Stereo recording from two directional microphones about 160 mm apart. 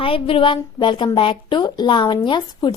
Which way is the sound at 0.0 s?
35° left (ahead or behind).